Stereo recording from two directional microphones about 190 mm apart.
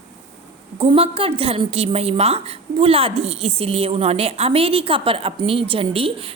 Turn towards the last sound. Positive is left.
turn(degrees=-30)  # may be behind; listen again after turning